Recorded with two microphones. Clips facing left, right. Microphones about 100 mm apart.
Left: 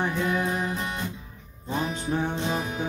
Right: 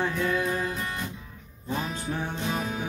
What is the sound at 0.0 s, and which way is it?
Music, 20° left (ahead or behind).